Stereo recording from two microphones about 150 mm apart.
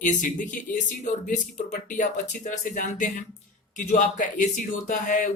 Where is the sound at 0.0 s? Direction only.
60° left (ahead or behind).